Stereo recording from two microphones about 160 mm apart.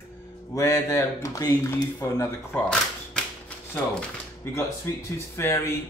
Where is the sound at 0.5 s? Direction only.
20° left (ahead or behind).